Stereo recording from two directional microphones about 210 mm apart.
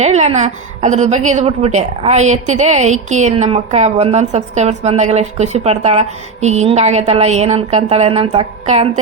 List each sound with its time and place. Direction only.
0.0 s a woman's voice: 35° right (ahead or behind)